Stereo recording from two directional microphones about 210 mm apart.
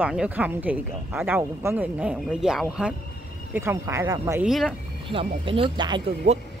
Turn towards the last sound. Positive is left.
turn(degrees=-20)  # may be behind; listen again after turning